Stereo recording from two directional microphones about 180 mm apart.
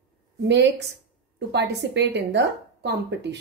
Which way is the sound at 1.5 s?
70° right (ahead or behind).